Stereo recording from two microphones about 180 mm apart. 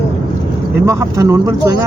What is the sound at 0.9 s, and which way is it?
Speech, 15° right (ahead or behind).